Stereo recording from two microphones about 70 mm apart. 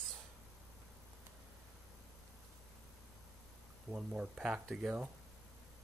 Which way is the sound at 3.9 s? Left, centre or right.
Centre.